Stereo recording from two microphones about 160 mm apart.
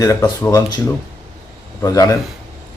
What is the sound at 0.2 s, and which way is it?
Speech, 15° left (ahead or behind).